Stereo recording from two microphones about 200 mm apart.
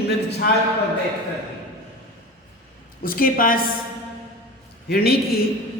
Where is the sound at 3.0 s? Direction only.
45° left (ahead or behind).